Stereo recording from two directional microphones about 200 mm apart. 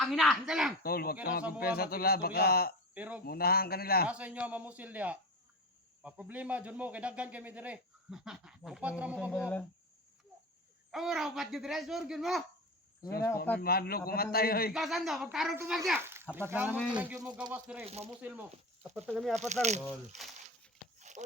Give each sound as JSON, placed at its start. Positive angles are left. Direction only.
{"t": 0.0, "sound": "speech", "side_deg": 0}
{"t": 0.8, "sound": "a man's voice", "side_deg": 50}
{"t": 2.9, "sound": "speech", "side_deg": -10}
{"t": 3.2, "sound": "a man's voice", "side_deg": 50}
{"t": 4.0, "sound": "speech", "side_deg": -5}
{"t": 10.9, "sound": "speech", "side_deg": 0}
{"t": 13.6, "sound": "a man's voice", "side_deg": 50}
{"t": 14.7, "sound": "speech", "side_deg": 0}
{"t": 17.8, "sound": "speech", "side_deg": -30}
{"t": 18.2, "sound": "speech", "side_deg": -10}
{"t": 19.4, "sound": "speech", "side_deg": -35}
{"t": 19.8, "sound": "speech", "side_deg": 0}
{"t": 21.0, "sound": "a sound", "side_deg": -35}